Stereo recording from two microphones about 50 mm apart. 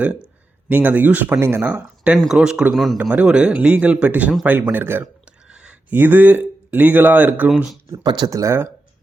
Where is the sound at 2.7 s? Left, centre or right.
Centre.